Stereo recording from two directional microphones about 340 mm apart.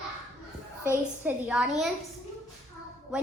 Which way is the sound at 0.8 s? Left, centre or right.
Centre.